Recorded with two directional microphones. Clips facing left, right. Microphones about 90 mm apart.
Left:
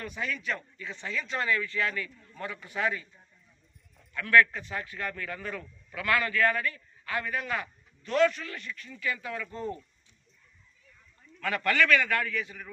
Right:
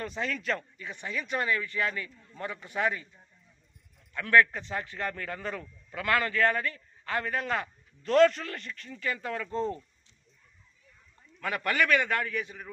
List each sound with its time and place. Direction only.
0.0 s a man's voice: 30° right (ahead or behind)
0.3 s a man's voice: 45° right (ahead or behind)
0.8 s a man's voice: 20° right (ahead or behind)
4.1 s speech: 25° right (ahead or behind)
11.3 s a man's voice: 20° right (ahead or behind)